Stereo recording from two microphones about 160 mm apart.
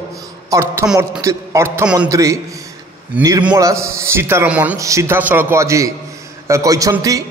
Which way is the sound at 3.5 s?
20° right (ahead or behind).